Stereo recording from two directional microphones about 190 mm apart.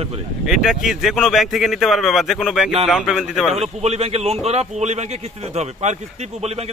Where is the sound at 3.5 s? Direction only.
35° right (ahead or behind).